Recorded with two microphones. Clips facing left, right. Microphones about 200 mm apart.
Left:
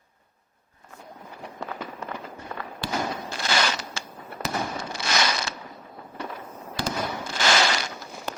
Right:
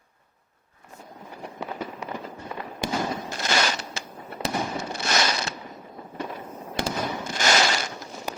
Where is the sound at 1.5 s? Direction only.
15° right (ahead or behind).